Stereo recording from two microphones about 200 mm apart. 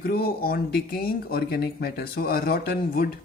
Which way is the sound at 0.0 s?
50° left (ahead or behind).